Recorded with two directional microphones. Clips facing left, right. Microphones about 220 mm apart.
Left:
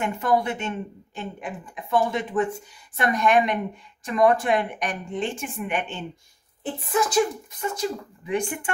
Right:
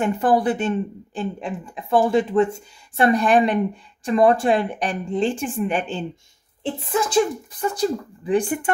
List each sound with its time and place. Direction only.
0.0 s speech: 30° right (ahead or behind)